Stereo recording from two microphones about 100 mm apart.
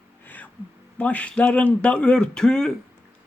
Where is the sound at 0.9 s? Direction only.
15° left (ahead or behind).